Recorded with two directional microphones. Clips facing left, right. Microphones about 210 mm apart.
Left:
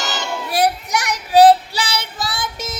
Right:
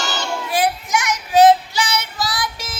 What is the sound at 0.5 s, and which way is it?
Child singing, 40° left (ahead or behind).